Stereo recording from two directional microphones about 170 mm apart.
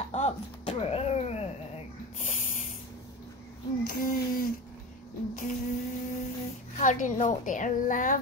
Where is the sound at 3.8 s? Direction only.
55° left (ahead or behind).